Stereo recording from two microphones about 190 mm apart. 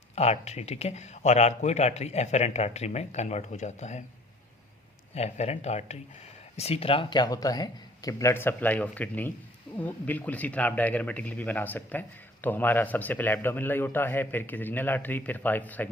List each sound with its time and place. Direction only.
0.2 s speech: 35° left (ahead or behind)
5.1 s a man's voice: 35° left (ahead or behind); by 15.9 s 10° left (ahead or behind)